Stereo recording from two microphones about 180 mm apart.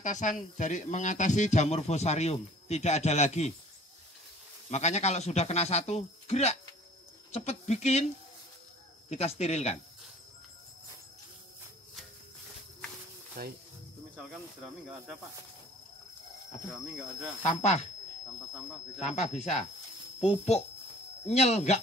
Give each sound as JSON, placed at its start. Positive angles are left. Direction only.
{"t": 0.0, "sound": "speech", "side_deg": 45}
{"t": 4.6, "sound": "speech", "side_deg": 40}
{"t": 9.1, "sound": "speech", "side_deg": 35}
{"t": 13.4, "sound": "speech", "side_deg": -55}
{"t": 16.7, "sound": "speech", "side_deg": -5}
{"t": 17.4, "sound": "speech", "side_deg": 40}
{"t": 18.9, "sound": "speech", "side_deg": 40}